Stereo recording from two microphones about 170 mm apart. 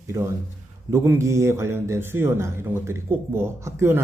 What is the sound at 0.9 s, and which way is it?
Speech, 15° right (ahead or behind).